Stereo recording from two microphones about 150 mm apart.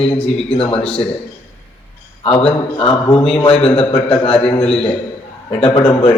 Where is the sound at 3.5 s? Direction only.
5° left (ahead or behind).